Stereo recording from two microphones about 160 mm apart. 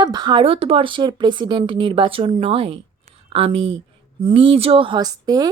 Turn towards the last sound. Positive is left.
turn(degrees=-25)  # may be behind; listen again after turning